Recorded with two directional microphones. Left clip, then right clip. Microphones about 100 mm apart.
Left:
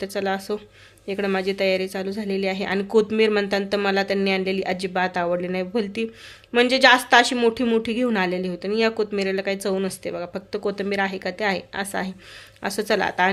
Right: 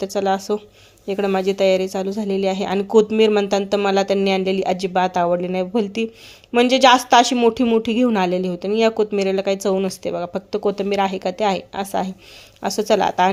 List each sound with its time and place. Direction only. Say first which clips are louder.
0.0 s speech: right 5 dB; 35° right (ahead or behind)